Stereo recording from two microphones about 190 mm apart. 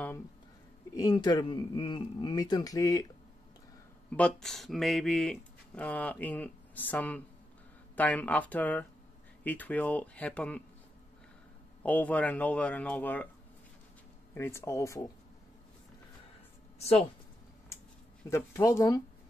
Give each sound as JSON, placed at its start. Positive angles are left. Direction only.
{"t": 0.9, "sound": "speech", "side_deg": 20}
{"t": 4.1, "sound": "speech", "side_deg": 5}
{"t": 11.8, "sound": "speech", "side_deg": 10}
{"t": 14.3, "sound": "speech", "side_deg": 15}
{"t": 16.7, "sound": "speech", "side_deg": 35}
{"t": 18.3, "sound": "speech", "side_deg": 15}